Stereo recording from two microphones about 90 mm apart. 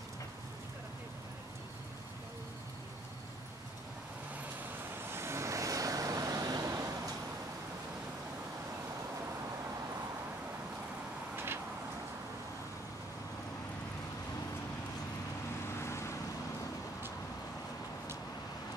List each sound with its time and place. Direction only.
5.1 s vehicle: 30° right (ahead or behind)
11.3 s a sound: 25° right (ahead or behind)
15.8 s vehicle: 30° left (ahead or behind)